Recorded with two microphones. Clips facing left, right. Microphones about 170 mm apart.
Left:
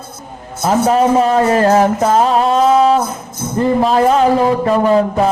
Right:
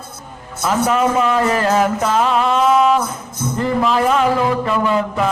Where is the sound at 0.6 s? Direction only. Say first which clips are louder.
Left 4 dB; 35° left (ahead or behind).